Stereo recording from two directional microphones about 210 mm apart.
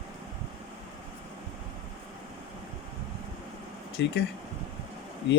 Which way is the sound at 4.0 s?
55° left (ahead or behind).